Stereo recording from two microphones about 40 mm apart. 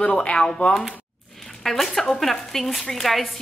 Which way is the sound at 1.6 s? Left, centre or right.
Centre.